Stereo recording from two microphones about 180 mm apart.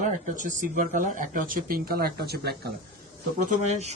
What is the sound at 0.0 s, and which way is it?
Speech, 45° right (ahead or behind).